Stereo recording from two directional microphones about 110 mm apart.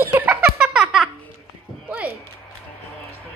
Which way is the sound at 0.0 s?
15° right (ahead or behind).